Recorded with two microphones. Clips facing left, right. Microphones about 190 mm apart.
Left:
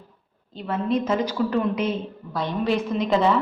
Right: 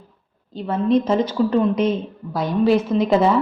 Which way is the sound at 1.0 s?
30° right (ahead or behind).